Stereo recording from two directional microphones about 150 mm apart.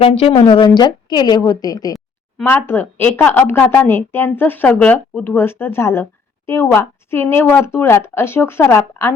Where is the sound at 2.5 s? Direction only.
15° left (ahead or behind).